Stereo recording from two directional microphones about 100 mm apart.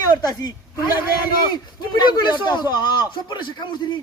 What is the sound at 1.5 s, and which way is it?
Speech, 50° left (ahead or behind).